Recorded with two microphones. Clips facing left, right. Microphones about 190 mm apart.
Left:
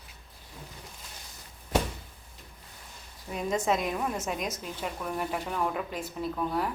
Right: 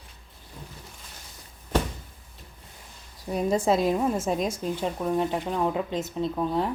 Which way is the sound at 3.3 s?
40° right (ahead or behind).